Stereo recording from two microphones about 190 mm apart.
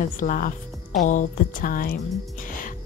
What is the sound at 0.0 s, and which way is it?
A woman's voice, 45° left (ahead or behind).